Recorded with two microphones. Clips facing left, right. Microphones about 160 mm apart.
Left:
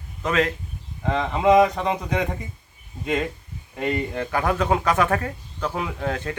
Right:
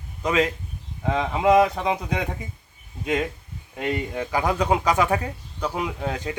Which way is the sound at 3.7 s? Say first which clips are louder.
Left 1 dB; 5° right (ahead or behind).